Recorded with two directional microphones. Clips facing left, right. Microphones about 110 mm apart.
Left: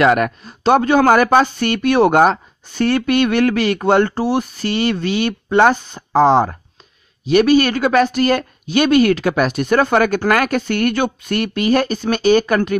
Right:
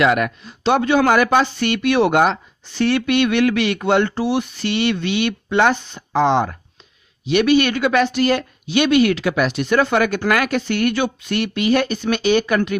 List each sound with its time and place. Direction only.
0.0 s speech: 45° left (ahead or behind)